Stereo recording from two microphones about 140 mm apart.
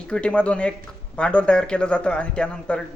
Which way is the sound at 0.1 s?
5° left (ahead or behind).